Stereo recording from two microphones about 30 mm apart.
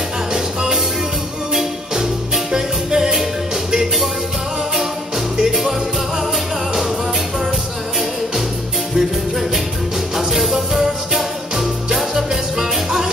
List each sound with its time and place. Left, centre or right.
0.3 s music: right
1.5 s music: centre
5.4 s music: centre
8.9 s music: centre